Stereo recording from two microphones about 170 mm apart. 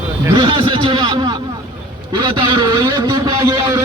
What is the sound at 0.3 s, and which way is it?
Speech, 25° right (ahead or behind).